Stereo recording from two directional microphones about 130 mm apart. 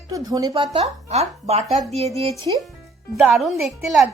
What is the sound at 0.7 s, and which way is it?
Speech, 55° right (ahead or behind).